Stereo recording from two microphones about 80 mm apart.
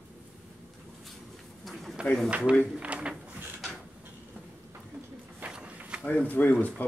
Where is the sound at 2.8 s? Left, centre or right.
Centre.